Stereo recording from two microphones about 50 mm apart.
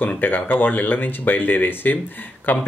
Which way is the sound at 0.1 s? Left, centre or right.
Left.